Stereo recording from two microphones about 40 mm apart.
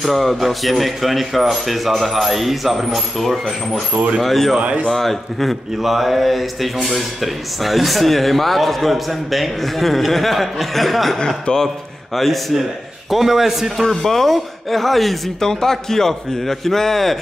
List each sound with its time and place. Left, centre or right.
0.0 s speech: centre
4.6 s speech: right
4.9 s speech: centre
11.4 s a man's voice: centre
12.2 s speech: centre
13.1 s a man's voice: centre
13.8 s a man's voice: centre